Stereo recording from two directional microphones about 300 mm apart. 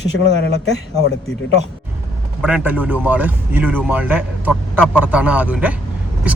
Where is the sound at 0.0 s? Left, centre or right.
Left.